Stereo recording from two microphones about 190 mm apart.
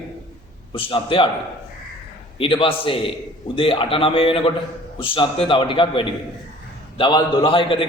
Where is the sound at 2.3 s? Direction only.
25° left (ahead or behind).